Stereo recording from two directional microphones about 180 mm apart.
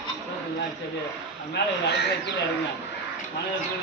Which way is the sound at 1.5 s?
65° left (ahead or behind).